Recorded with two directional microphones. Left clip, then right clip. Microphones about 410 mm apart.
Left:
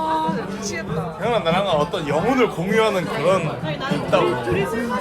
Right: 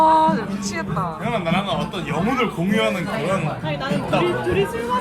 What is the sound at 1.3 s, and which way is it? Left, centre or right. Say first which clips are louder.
A man's voice: left 5 dB; left.